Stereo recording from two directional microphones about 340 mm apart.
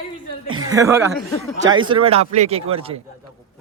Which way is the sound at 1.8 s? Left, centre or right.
Centre.